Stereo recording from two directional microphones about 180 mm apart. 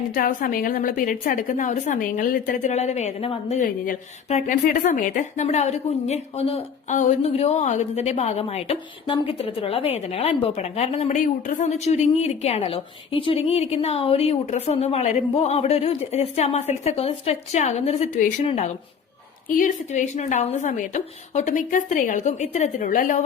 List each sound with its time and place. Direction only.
0.1 s a woman's voice: 50° left (ahead or behind)